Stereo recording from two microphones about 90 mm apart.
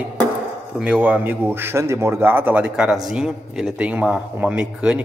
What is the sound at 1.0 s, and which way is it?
A man's voice, 20° right (ahead or behind).